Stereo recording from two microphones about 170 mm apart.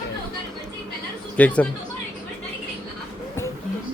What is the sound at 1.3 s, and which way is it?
Speech, 10° left (ahead or behind).